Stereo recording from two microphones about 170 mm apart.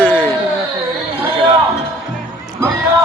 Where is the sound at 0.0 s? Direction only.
10° left (ahead or behind).